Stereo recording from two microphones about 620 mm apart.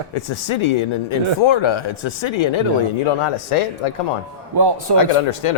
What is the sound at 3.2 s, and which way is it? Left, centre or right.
Speech, left.